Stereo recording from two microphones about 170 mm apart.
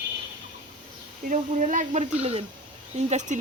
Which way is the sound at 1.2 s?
45° right (ahead or behind).